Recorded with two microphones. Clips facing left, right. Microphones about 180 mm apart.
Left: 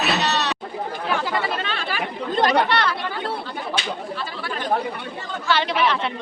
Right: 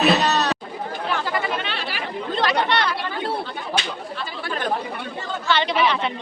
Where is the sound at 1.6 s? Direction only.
45° left (ahead or behind).